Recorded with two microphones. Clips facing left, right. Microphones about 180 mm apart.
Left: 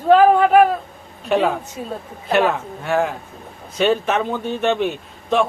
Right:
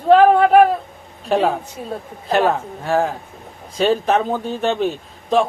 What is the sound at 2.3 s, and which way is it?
A man's voice, 35° right (ahead or behind).